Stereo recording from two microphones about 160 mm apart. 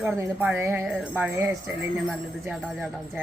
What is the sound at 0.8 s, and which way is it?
Music, 5° right (ahead or behind).